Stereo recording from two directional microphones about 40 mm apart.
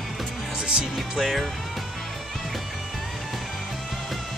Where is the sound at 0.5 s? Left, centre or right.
Right.